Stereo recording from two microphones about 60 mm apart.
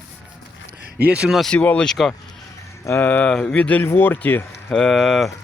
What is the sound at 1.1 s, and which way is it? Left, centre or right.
Speech, centre.